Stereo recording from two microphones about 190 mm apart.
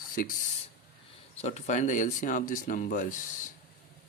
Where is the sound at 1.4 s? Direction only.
35° left (ahead or behind).